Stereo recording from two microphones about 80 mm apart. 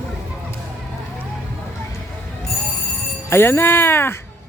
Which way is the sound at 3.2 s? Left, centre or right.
Left.